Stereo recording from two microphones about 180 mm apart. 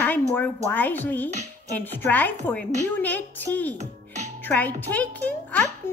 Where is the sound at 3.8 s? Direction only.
40° right (ahead or behind).